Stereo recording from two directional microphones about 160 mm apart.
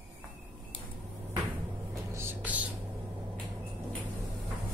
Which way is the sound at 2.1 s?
10° right (ahead or behind).